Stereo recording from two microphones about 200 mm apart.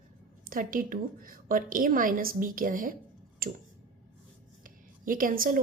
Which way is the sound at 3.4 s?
45° right (ahead or behind).